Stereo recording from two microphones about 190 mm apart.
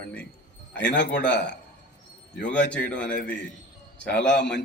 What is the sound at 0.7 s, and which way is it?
A man's voice, 65° left (ahead or behind).